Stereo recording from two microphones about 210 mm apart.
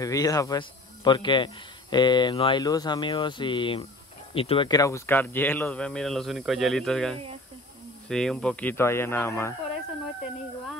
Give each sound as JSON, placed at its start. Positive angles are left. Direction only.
{"t": 0.0, "sound": "speech", "side_deg": 15}